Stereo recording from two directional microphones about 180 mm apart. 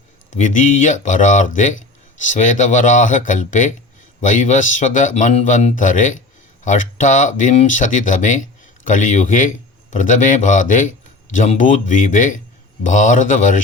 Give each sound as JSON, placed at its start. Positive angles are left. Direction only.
{"t": 0.3, "sound": "speech", "side_deg": 45}